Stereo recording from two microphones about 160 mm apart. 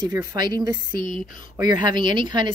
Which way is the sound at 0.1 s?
15° right (ahead or behind).